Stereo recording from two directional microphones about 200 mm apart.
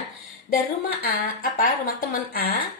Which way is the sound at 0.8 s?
50° left (ahead or behind).